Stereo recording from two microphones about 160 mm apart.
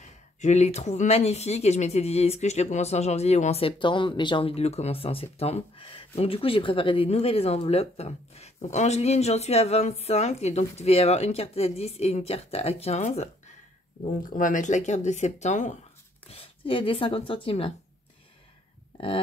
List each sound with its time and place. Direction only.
0.4 s speech: 45° left (ahead or behind)
14.3 s speech: 55° left (ahead or behind)
16.3 s speech: 35° left (ahead or behind)
18.9 s a sound: 35° left (ahead or behind)